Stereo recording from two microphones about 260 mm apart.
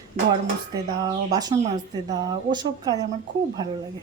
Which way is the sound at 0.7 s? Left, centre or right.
Centre.